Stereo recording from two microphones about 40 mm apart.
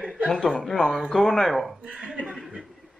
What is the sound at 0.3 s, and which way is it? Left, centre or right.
A man's voice, centre.